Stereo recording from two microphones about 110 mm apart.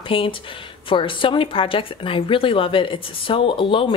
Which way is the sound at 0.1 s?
55° left (ahead or behind).